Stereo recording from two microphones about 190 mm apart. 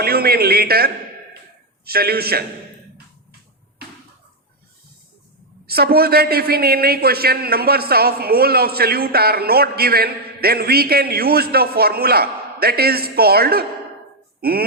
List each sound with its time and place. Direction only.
0.0 s a man's voice: 55° right (ahead or behind)
5.6 s a man's voice: 55° right (ahead or behind)